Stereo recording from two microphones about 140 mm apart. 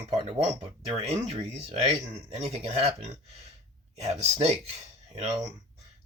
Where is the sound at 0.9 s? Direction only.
50° right (ahead or behind).